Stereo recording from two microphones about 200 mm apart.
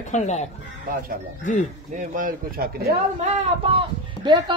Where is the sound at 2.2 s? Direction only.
45° right (ahead or behind).